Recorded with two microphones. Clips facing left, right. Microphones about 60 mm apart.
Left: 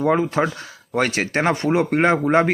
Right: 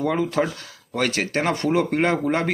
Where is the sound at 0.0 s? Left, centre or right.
Left.